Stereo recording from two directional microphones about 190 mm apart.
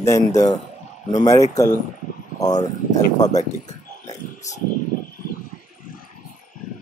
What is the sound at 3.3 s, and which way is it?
Speech, 40° left (ahead or behind).